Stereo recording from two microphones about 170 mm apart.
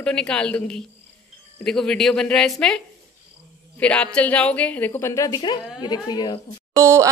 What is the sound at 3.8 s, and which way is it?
A man's voice, 5° left (ahead or behind).